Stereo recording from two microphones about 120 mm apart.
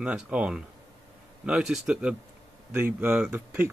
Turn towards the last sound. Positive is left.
turn(degrees=-15)  # may be behind; listen again after turning